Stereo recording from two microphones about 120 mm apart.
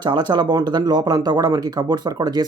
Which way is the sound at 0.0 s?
40° right (ahead or behind).